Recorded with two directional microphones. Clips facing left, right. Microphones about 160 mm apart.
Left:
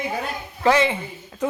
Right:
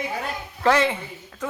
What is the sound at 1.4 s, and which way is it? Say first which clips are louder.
Speech: left 6 dB; 20° left (ahead or behind).